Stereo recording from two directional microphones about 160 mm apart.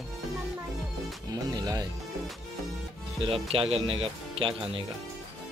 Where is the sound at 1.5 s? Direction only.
25° right (ahead or behind).